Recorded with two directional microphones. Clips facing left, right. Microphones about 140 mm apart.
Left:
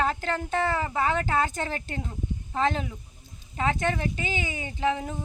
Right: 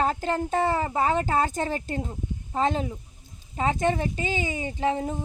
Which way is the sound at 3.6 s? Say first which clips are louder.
Right 2 dB; 35° right (ahead or behind).